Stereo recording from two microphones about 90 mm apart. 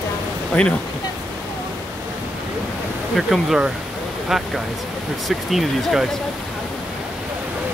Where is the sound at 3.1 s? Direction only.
Centre (ahead or behind).